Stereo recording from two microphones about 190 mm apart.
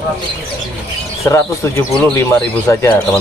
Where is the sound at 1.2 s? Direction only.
15° left (ahead or behind).